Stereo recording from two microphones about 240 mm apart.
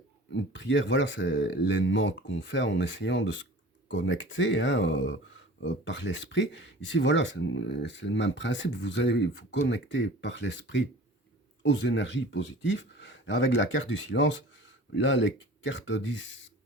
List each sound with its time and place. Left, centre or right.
0.3 s speech: left